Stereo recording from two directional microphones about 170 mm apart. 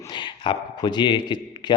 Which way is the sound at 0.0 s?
25° left (ahead or behind).